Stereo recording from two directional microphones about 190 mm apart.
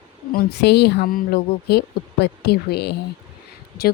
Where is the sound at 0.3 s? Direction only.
60° left (ahead or behind).